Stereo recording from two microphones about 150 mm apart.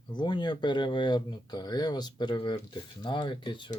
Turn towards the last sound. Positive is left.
turn(degrees=30)  # may be behind; listen again after turning